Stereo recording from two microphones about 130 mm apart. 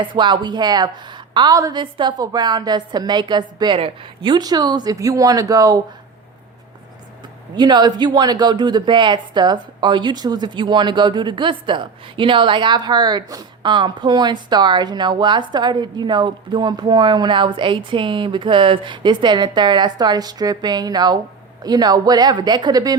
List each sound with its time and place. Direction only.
0.0 s speech: 35° right (ahead or behind)
7.5 s speech: 35° right (ahead or behind)